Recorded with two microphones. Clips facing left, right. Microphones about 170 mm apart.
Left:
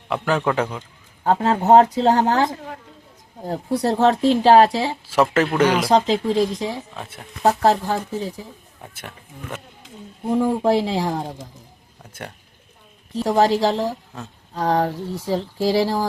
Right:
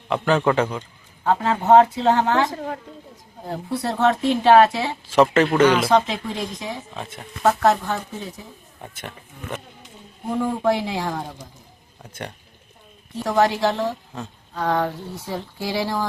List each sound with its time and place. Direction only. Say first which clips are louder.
0.1 s a man's voice: right 2 dB; 5° left (ahead or behind)
1.2 s speech: left 2 dB; 40° left (ahead or behind)
5.0 s speech: right 3 dB; 5° left (ahead or behind)
5.9 s speech: left 3 dB; 30° left (ahead or behind)
8.8 s a man's voice: right 3 dB; 5° left (ahead or behind)
10.3 s speech: left 3 dB; 30° left (ahead or behind)
13.2 s speech: left 2 dB; 35° left (ahead or behind)